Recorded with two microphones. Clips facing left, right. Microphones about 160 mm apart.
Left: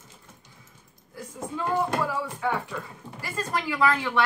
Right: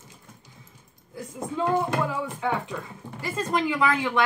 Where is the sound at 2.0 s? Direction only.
20° right (ahead or behind).